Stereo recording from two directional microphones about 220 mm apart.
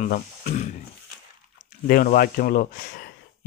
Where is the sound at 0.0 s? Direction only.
35° left (ahead or behind).